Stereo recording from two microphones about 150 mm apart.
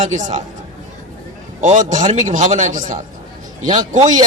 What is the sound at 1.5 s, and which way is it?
A man's voice, 55° right (ahead or behind).